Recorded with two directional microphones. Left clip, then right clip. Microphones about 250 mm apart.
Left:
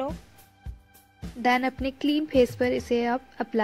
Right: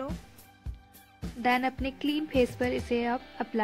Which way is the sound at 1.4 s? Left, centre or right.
Centre.